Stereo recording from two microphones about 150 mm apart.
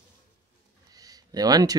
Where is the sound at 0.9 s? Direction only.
25° right (ahead or behind).